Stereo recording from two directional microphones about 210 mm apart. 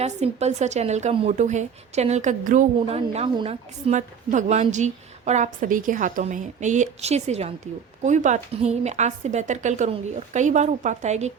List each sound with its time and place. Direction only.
0.0 s a woman's voice: 30° right (ahead or behind)